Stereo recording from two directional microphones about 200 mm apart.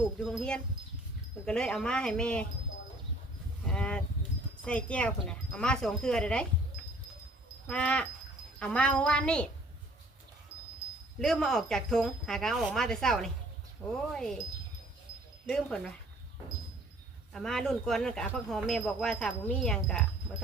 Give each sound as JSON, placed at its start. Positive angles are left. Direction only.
{"t": 0.0, "sound": "speech", "side_deg": 0}
{"t": 3.7, "sound": "a sound", "side_deg": 5}
{"t": 4.6, "sound": "speech", "side_deg": 5}
{"t": 7.7, "sound": "speech", "side_deg": 5}
{"t": 11.2, "sound": "speech", "side_deg": 5}
{"t": 15.4, "sound": "speech", "side_deg": 0}
{"t": 17.3, "sound": "speech", "side_deg": 0}